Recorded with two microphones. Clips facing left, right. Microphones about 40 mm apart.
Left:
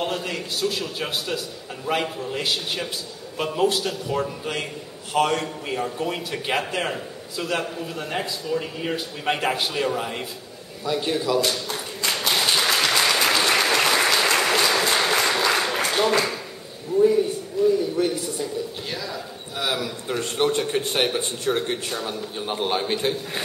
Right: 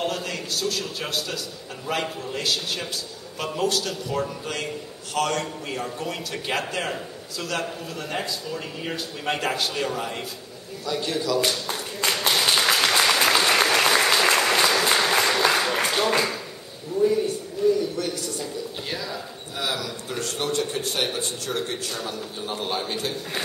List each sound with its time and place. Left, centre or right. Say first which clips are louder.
0.0 s a man's voice: left 1 dB; centre
12.1 s applause: even; centre
16.9 s a man's voice: left 3 dB; left
18.9 s a sound: even; centre
19.6 s a man's voice: left 2 dB; left